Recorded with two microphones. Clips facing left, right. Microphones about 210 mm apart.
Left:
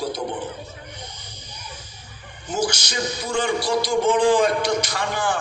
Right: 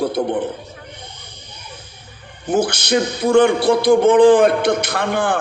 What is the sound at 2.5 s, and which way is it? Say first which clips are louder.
A man's voice: right 8 dB; 55° right (ahead or behind).